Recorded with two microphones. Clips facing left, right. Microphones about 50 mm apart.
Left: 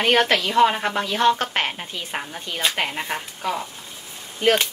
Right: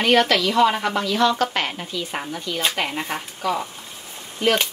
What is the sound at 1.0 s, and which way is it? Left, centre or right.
A woman's voice, left.